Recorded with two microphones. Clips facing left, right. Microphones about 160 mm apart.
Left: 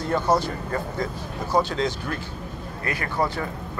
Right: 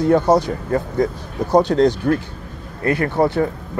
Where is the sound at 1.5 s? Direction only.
65° right (ahead or behind).